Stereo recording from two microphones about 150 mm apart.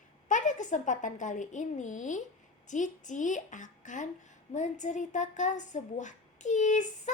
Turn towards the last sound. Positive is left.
turn(degrees=55)  # may be behind; listen again after turning